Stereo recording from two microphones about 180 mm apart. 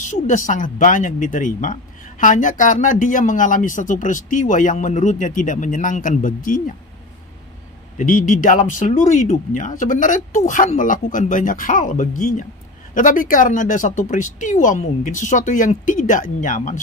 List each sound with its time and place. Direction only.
0.3 s a man's voice: 45° left (ahead or behind)
8.0 s a man's voice: 45° left (ahead or behind)